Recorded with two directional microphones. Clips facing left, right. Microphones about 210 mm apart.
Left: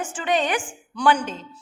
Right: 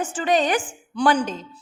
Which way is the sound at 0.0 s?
35° right (ahead or behind).